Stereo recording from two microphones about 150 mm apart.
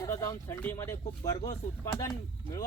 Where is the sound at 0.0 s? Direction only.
20° left (ahead or behind).